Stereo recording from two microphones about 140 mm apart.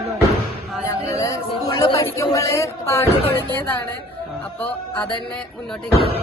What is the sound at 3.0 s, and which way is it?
Speech, 45° left (ahead or behind).